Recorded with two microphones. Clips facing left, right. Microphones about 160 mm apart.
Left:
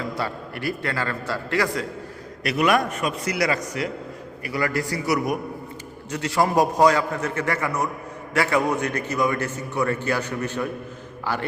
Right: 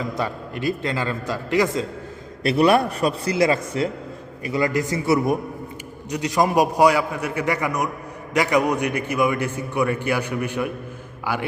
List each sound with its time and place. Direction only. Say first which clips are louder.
0.0 s a man's voice: right 2 dB; 20° right (ahead or behind)